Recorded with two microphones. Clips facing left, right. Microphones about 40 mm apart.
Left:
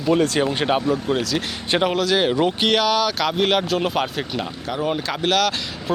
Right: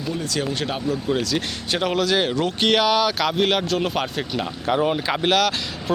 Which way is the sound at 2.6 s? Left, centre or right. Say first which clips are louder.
Right 4 dB; centre.